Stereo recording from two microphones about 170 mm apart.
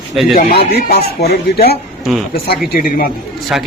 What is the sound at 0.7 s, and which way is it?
Speech, 70° left (ahead or behind).